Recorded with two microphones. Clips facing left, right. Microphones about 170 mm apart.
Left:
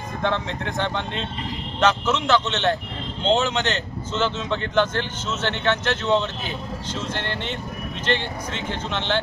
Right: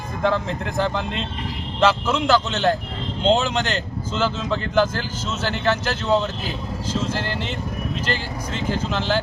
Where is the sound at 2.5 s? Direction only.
35° right (ahead or behind).